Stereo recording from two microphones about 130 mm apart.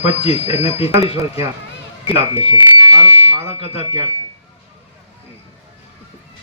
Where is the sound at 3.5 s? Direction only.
50° left (ahead or behind).